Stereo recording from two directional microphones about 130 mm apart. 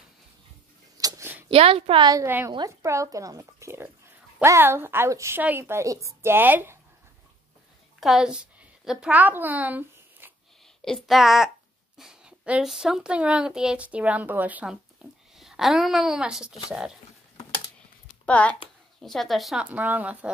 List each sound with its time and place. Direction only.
0.9 s a sound: 25° right (ahead or behind)
1.5 s a woman's voice: 45° right (ahead or behind)
2.2 s a woman's voice: 15° right (ahead or behind)
8.0 s a woman's voice: 5° right (ahead or behind)
10.8 s a child's voice: centre (ahead or behind)
18.2 s a child's voice: 10° left (ahead or behind)
19.6 s a woman's voice: 10° right (ahead or behind)